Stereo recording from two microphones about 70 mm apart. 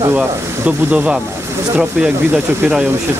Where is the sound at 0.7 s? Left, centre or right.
Centre.